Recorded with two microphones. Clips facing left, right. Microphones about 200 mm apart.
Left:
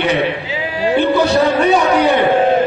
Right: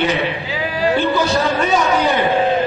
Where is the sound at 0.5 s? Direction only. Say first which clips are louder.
Right 2 dB; 20° left (ahead or behind).